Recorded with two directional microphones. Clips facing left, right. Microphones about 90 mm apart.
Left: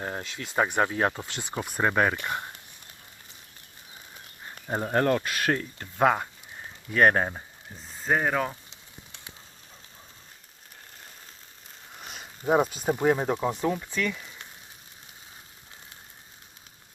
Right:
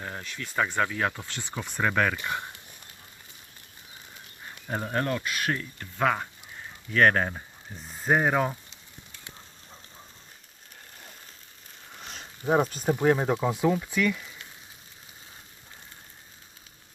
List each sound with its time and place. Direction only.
0.0 s speech: 30° left (ahead or behind)
1.2 s speech: 15° left (ahead or behind)
4.7 s speech: 25° left (ahead or behind)
4.9 s speech: 45° left (ahead or behind)
6.9 s speech: 20° left (ahead or behind)
7.9 s speech: 10° right (ahead or behind)
11.9 s a sound: 10° left (ahead or behind)
12.9 s speech: 5° left (ahead or behind)
13.8 s speech: 10° right (ahead or behind)